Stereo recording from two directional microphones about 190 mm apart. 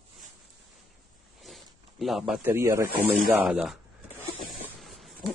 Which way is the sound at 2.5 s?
15° right (ahead or behind).